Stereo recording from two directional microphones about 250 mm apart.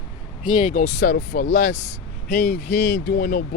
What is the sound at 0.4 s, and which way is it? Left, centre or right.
Speech, left.